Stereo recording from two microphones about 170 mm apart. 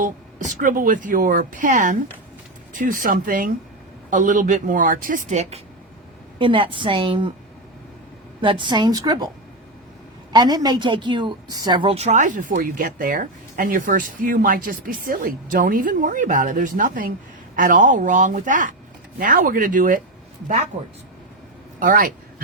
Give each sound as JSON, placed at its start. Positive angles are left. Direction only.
{"t": 0.0, "sound": "a woman's voice", "side_deg": -45}
{"t": 6.4, "sound": "a woman's voice", "side_deg": -30}
{"t": 8.4, "sound": "a woman's voice", "side_deg": -30}
{"t": 10.3, "sound": "a woman's voice", "side_deg": -25}
{"t": 21.8, "sound": "a man's voice", "side_deg": -55}